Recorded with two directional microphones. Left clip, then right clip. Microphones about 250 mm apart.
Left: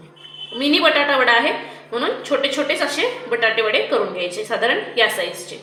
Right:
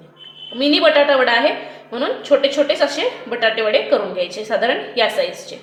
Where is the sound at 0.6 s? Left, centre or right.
Right.